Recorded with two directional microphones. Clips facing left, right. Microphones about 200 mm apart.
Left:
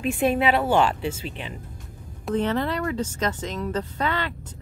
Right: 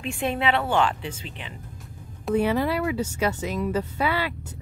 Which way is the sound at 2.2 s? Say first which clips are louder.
Right 2 dB; 10° right (ahead or behind).